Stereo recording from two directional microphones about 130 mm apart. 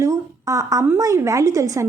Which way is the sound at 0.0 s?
25° right (ahead or behind).